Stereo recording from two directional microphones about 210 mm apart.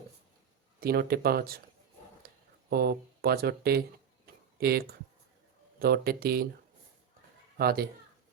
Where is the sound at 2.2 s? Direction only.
50° right (ahead or behind).